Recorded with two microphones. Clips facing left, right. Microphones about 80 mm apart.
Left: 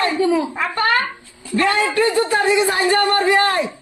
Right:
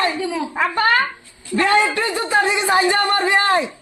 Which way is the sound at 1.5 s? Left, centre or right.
Right.